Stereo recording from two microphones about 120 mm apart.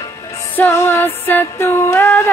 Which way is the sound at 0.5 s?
20° left (ahead or behind).